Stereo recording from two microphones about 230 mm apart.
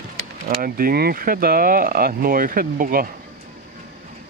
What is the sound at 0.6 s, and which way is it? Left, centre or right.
Speech, right.